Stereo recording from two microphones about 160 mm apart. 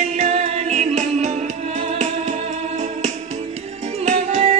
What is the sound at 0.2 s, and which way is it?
Music, 45° right (ahead or behind).